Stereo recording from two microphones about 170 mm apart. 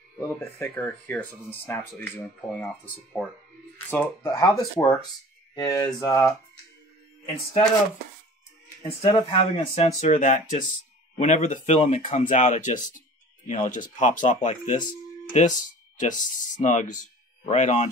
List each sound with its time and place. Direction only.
0.4 s speech: 10° left (ahead or behind)
8.8 s speech: 30° left (ahead or behind)